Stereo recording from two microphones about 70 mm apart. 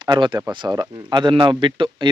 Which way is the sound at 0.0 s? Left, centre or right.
Right.